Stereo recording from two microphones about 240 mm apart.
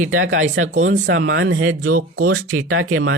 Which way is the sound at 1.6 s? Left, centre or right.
Right.